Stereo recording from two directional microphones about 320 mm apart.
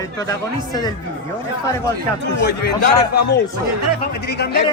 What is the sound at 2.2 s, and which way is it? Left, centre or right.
Speech, left.